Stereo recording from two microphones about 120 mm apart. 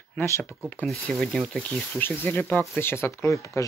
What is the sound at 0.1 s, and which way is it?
Speech, 15° left (ahead or behind).